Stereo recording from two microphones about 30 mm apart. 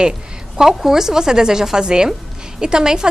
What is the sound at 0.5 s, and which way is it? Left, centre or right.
A woman's voice, centre.